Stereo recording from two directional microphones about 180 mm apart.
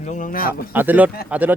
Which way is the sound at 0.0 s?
45° left (ahead or behind).